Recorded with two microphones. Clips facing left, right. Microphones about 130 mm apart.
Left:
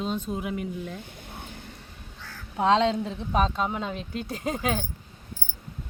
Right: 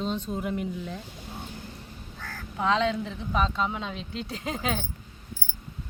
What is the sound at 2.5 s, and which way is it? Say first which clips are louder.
Speech: left 3 dB; 25° left (ahead or behind).